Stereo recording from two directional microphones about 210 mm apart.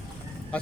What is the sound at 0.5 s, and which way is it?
Speech, 5° left (ahead or behind).